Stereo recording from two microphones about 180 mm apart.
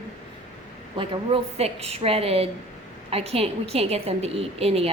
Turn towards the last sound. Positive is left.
turn(degrees=-35)  # may be behind; listen again after turning